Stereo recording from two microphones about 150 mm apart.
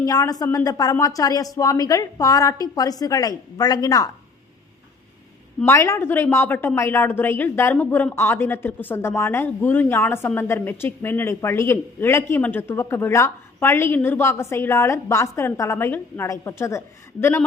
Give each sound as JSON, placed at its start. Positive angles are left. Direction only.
{"t": 0.0, "sound": "speech", "side_deg": 25}
{"t": 5.6, "sound": "speech", "side_deg": 20}